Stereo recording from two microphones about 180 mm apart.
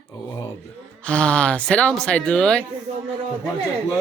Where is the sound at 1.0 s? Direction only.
5° left (ahead or behind).